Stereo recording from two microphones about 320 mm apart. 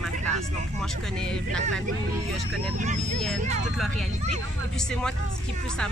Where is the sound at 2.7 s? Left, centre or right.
Right.